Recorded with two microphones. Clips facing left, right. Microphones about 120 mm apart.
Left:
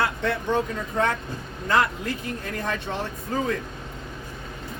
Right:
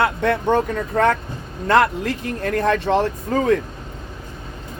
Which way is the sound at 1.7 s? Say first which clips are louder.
Right 6 dB; 70° right (ahead or behind).